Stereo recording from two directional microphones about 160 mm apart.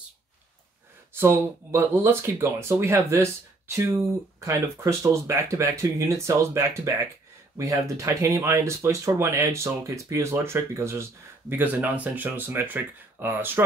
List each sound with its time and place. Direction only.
1.1 s speech: 15° right (ahead or behind)